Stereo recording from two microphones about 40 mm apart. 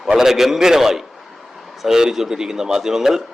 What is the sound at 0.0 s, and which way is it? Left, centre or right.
A man's voice, centre.